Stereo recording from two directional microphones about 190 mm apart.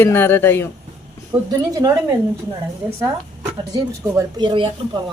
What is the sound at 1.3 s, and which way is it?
Speech, 20° right (ahead or behind).